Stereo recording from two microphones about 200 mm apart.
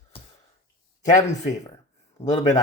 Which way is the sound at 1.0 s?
35° left (ahead or behind).